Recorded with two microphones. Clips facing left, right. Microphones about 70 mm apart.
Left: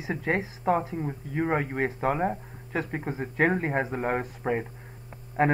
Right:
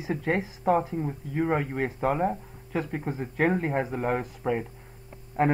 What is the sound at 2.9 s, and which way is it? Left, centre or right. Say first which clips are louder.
Speech: left 1 dB; left.